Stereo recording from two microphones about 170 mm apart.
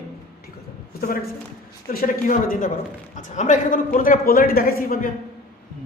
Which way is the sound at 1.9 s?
55° left (ahead or behind).